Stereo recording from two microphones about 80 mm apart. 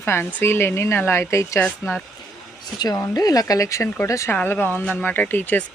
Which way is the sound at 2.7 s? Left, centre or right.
Left.